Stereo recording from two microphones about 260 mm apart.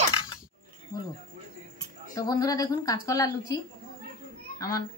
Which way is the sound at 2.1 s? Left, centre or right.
Centre.